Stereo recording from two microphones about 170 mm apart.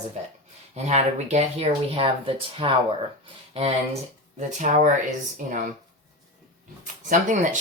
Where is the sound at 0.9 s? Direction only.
40° right (ahead or behind).